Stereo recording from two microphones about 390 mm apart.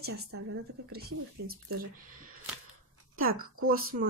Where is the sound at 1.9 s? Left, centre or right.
Right.